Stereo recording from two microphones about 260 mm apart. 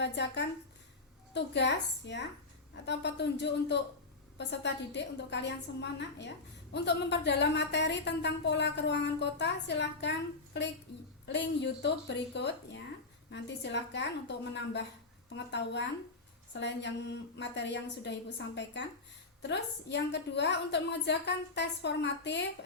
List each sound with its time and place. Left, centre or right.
0.0 s a woman's voice: left